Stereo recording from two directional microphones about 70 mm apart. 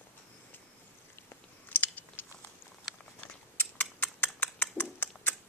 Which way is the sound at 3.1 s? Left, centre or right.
Left.